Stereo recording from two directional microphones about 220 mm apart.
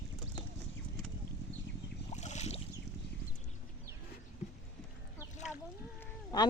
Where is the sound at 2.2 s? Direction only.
30° left (ahead or behind).